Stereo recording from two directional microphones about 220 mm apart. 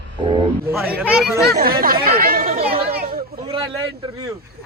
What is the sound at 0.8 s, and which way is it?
Speech, 5° right (ahead or behind).